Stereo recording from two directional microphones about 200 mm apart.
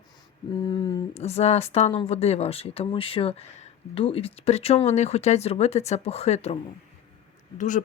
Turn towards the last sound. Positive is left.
turn(degrees=40)  # may be behind; listen again after turning